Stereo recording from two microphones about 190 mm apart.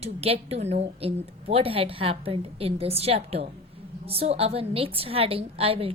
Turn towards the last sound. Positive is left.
turn(degrees=-30)  # may be behind; listen again after turning